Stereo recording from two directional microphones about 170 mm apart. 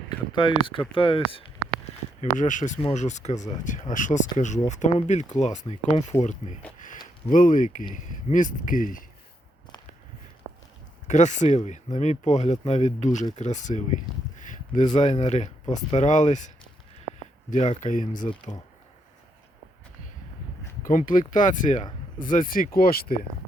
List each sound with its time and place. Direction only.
0.3 s speech: 25° left (ahead or behind)
0.9 s a sound: 30° left (ahead or behind)
2.3 s speech: 50° left (ahead or behind)
11.1 s speech: 45° left (ahead or behind)
14.3 s a sound: 50° left (ahead or behind)
14.9 s speech: 40° left (ahead or behind)
17.7 s speech: 45° left (ahead or behind)
20.8 s speech: 50° left (ahead or behind)